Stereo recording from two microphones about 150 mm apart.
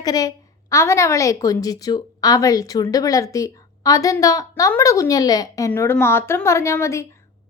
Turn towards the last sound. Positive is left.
turn(degrees=20)  # may be behind; listen again after turning